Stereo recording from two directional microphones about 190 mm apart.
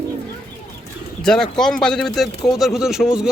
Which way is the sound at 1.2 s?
5° left (ahead or behind).